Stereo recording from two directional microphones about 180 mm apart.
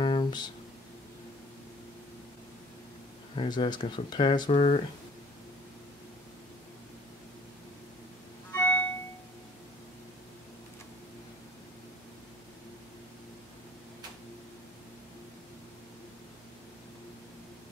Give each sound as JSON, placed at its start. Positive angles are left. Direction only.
{"t": 0.0, "sound": "music", "side_deg": 25}
{"t": 3.3, "sound": "speech", "side_deg": 25}
{"t": 8.5, "sound": "music", "side_deg": 10}